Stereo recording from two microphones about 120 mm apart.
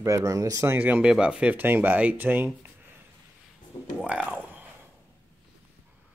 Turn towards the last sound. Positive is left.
turn(degrees=-15)  # may be behind; listen again after turning